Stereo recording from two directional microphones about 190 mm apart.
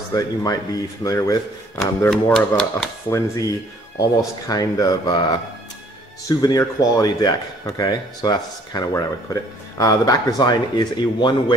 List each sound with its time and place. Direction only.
0.1 s speech: 20° left (ahead or behind)
2.0 s speech: 5° left (ahead or behind)
3.1 s speech: 15° left (ahead or behind)